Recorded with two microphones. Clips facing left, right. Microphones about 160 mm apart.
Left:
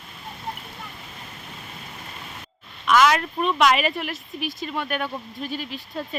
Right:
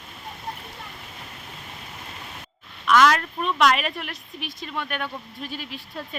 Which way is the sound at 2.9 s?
5° left (ahead or behind).